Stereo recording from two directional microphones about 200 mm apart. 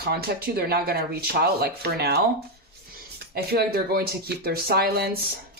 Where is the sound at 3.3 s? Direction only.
50° right (ahead or behind).